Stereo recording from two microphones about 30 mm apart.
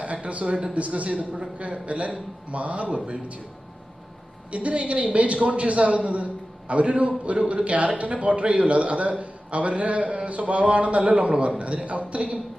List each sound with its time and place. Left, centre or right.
0.0 s a sound: right
0.4 s a man's voice: right
0.7 s a man's voice: right
4.5 s a man's voice: right